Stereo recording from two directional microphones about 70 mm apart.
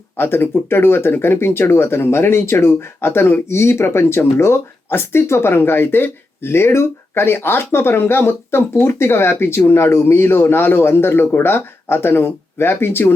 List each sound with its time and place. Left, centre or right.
0.2 s speech: left